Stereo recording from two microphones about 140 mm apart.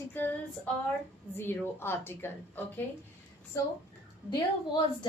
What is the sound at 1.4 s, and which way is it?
Speech, 15° left (ahead or behind).